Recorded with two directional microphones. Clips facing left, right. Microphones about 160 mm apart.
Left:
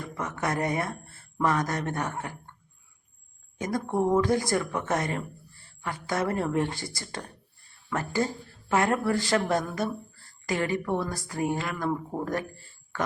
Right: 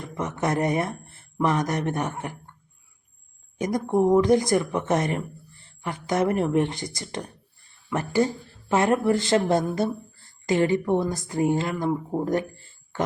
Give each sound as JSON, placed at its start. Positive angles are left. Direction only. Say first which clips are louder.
{"t": 0.0, "sound": "speech", "louder": "right 4 dB", "side_deg": -20}
{"t": 3.6, "sound": "speech", "louder": "right 5 dB", "side_deg": -15}